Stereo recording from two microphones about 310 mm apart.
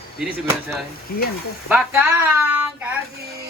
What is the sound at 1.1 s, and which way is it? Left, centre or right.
Speech, left.